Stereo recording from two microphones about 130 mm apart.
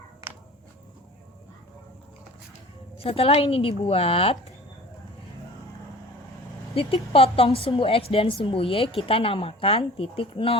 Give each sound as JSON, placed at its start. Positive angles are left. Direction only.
{"t": 3.0, "sound": "a woman's voice", "side_deg": 45}
{"t": 6.7, "sound": "a woman's voice", "side_deg": 45}